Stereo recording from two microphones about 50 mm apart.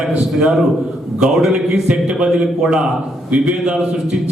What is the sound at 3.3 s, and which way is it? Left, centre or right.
Speech, right.